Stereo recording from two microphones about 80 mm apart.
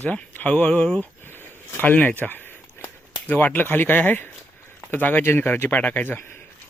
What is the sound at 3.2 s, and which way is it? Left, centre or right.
Speech, left.